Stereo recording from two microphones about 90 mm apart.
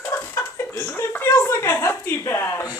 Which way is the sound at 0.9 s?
20° left (ahead or behind).